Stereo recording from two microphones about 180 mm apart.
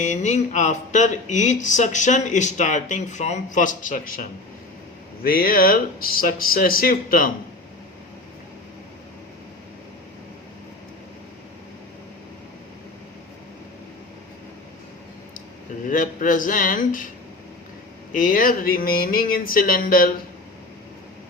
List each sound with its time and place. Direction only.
0.0 s speech: 40° left (ahead or behind)
15.9 s speech: 50° left (ahead or behind)
18.1 s speech: 50° left (ahead or behind)